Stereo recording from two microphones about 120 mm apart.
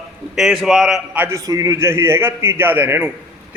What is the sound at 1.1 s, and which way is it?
Speech, 15° right (ahead or behind).